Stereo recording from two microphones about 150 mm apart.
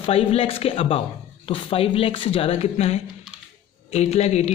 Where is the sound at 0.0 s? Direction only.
40° left (ahead or behind).